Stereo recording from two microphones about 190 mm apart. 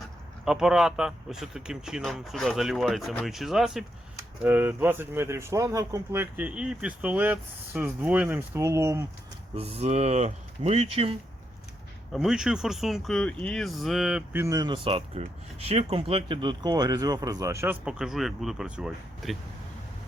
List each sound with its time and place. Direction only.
0.4 s speech: 5° right (ahead or behind)
9.6 s speech: 35° right (ahead or behind)
12.1 s speech: centre (ahead or behind)
14.4 s speech: 20° right (ahead or behind); by 19.4 s centre (ahead or behind)